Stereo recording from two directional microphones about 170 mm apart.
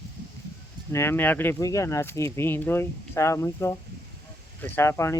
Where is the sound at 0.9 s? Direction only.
15° left (ahead or behind).